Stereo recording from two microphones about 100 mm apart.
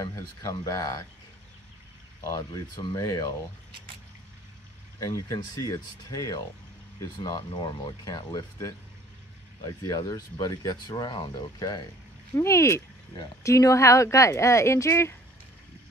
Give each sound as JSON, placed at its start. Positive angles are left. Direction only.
{"t": 0.1, "sound": "speech", "side_deg": 35}
{"t": 2.2, "sound": "speech", "side_deg": 40}
{"t": 5.0, "sound": "speech", "side_deg": 35}
{"t": 12.4, "sound": "speech", "side_deg": 30}